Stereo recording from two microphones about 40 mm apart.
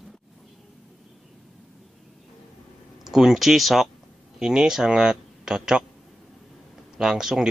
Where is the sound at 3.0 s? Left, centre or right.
Centre.